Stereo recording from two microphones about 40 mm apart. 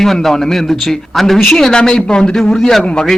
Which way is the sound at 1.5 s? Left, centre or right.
Centre.